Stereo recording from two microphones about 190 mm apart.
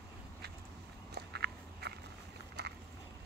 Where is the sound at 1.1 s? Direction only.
60° right (ahead or behind).